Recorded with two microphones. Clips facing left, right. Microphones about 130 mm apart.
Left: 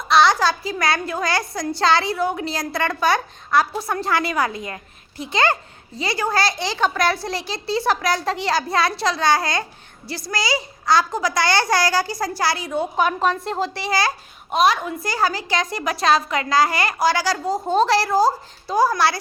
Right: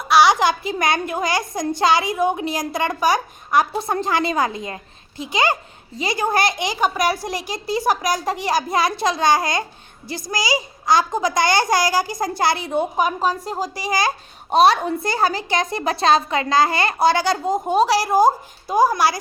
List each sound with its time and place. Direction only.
0.0 s a woman's voice: 10° right (ahead or behind)
14.5 s a woman's voice: 30° right (ahead or behind); by 19.2 s 15° right (ahead or behind)